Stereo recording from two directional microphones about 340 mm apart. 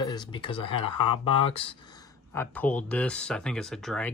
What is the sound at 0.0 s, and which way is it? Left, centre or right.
Speech, centre.